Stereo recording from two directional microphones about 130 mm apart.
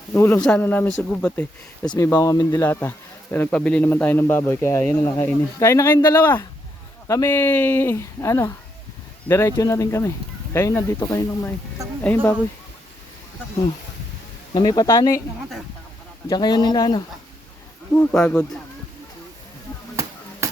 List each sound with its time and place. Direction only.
0.1 s speech: 15° left (ahead or behind)
2.2 s speech: 30° left (ahead or behind)
12.0 s speech: 10° left (ahead or behind)
14.5 s speech: 35° left (ahead or behind)
16.3 s speech: 30° left (ahead or behind)
17.9 s speech: 10° left (ahead or behind)